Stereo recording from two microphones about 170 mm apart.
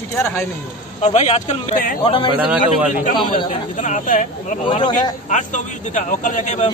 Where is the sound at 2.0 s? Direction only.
30° left (ahead or behind).